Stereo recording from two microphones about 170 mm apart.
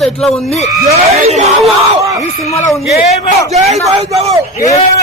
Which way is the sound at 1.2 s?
40° right (ahead or behind).